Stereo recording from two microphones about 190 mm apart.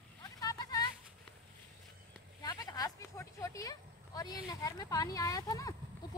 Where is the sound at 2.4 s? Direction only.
20° left (ahead or behind).